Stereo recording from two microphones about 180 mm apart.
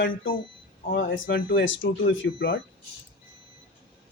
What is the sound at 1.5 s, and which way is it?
Speech, 90° left.